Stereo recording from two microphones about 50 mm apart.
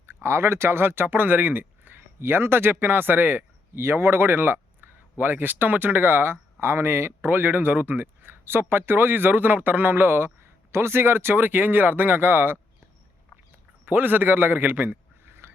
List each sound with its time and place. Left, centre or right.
0.0 s speech: right
3.8 s speech: right
13.8 s a man's voice: right
15.3 s a sound: right